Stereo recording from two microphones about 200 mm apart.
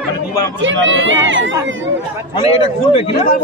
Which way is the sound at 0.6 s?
70° right (ahead or behind).